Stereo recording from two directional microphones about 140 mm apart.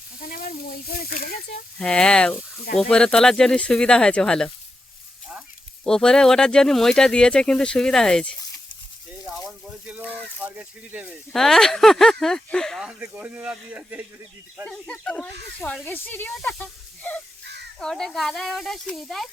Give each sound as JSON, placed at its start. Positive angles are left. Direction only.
{"t": 0.2, "sound": "speech", "side_deg": 90}
{"t": 1.8, "sound": "speech", "side_deg": 5}
{"t": 5.8, "sound": "speech", "side_deg": 5}
{"t": 9.4, "sound": "speech", "side_deg": -5}
{"t": 11.3, "sound": "speech", "side_deg": 0}
{"t": 13.0, "sound": "speech", "side_deg": -10}
{"t": 14.6, "sound": "speech", "side_deg": 5}
{"t": 16.6, "sound": "snake", "side_deg": 10}
{"t": 17.7, "sound": "speech", "side_deg": 5}